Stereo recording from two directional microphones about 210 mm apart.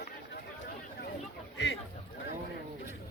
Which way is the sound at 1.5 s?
60° left (ahead or behind).